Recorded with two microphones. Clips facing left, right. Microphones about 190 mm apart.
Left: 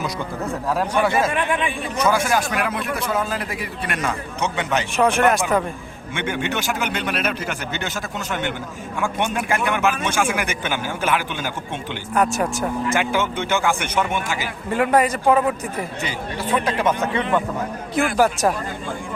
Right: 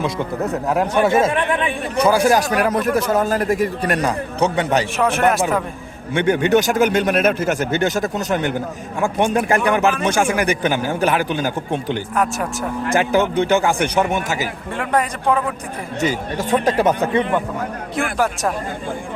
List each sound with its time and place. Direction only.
0.7 s speech: 25° right (ahead or behind)
2.0 s speech: 35° right (ahead or behind)
4.9 s speech: centre (ahead or behind)
6.1 s speech: 40° right (ahead or behind)
12.1 s speech: centre (ahead or behind)
12.9 s speech: 40° right (ahead or behind)
14.7 s speech: 5° left (ahead or behind)
16.0 s speech: 45° right (ahead or behind)
17.9 s speech: centre (ahead or behind)